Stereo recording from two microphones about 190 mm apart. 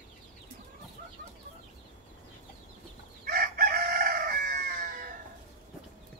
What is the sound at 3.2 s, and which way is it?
Chicken, 50° right (ahead or behind).